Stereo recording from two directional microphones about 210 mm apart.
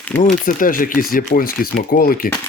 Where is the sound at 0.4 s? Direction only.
40° left (ahead or behind).